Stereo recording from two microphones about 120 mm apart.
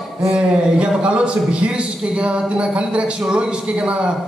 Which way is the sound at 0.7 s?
10° right (ahead or behind).